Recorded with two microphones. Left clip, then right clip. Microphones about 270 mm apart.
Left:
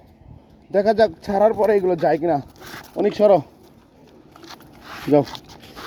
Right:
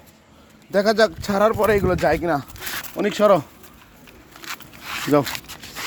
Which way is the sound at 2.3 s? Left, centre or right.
Right.